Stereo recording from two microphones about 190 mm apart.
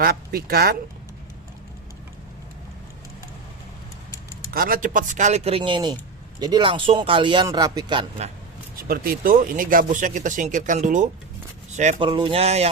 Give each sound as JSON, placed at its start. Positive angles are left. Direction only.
{"t": 0.0, "sound": "speech", "side_deg": -55}
{"t": 4.5, "sound": "speech", "side_deg": -50}
{"t": 8.7, "sound": "speech", "side_deg": -50}